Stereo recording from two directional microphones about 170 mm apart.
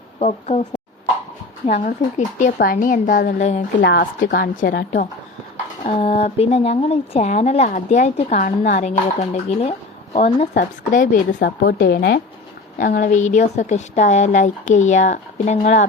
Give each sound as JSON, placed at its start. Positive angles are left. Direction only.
{"t": 0.2, "sound": "a woman's voice", "side_deg": 40}
{"t": 1.6, "sound": "speech", "side_deg": 45}
{"t": 3.8, "sound": "a woman's voice", "side_deg": 85}
{"t": 4.2, "sound": "a woman's voice", "side_deg": 55}
{"t": 5.8, "sound": "a woman's voice", "side_deg": 35}
{"t": 10.5, "sound": "a woman's voice", "side_deg": 60}
{"t": 11.3, "sound": "speech", "side_deg": 80}
{"t": 12.8, "sound": "speech", "side_deg": 50}